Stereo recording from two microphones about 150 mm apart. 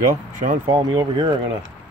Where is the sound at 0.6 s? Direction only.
30° right (ahead or behind).